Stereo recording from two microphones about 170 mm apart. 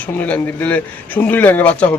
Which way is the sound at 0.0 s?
10° left (ahead or behind).